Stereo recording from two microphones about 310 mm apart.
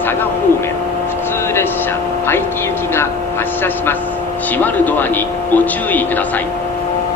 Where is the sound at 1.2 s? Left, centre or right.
Centre.